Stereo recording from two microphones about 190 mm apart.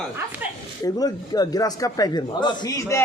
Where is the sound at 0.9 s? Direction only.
20° left (ahead or behind).